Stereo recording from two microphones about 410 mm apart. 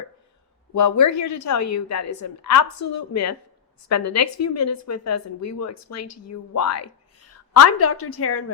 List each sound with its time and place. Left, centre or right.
0.7 s a woman's voice: left